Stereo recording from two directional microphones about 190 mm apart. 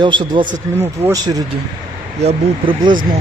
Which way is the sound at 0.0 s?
25° right (ahead or behind).